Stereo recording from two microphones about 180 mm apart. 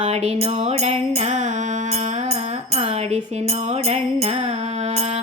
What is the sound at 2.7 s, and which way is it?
Music, 35° right (ahead or behind).